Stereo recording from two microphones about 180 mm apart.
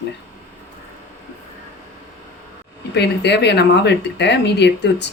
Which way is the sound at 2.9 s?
70° left (ahead or behind).